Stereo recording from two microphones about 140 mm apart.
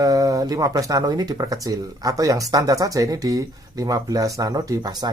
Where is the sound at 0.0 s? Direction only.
25° right (ahead or behind).